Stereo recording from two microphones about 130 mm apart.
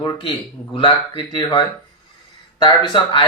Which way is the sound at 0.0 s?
40° left (ahead or behind).